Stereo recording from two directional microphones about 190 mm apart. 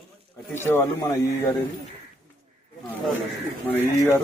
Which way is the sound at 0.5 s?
10° left (ahead or behind).